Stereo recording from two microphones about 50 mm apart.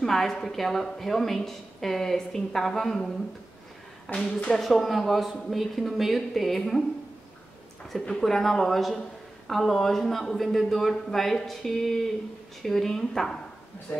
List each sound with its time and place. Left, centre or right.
0.0 s a woman's voice: centre
4.1 s a woman's voice: left
4.5 s speech: centre
8.1 s a woman's voice: centre